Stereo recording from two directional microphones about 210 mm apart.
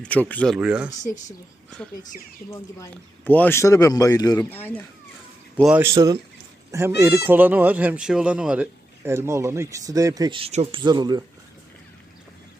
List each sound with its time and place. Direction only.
0.0 s speech: 5° left (ahead or behind)
2.5 s a man's voice: 15° left (ahead or behind)
5.5 s speech: 5° right (ahead or behind); by 11.2 s 20° right (ahead or behind)